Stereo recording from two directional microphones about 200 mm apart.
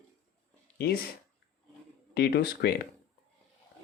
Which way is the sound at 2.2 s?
55° left (ahead or behind).